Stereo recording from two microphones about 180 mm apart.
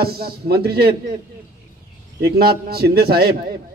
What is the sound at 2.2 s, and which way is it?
Speech, 60° right (ahead or behind).